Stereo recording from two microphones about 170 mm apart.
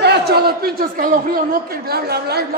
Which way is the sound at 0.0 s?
75° right (ahead or behind).